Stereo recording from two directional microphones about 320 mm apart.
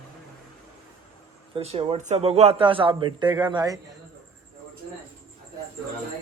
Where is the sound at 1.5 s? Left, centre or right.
Centre.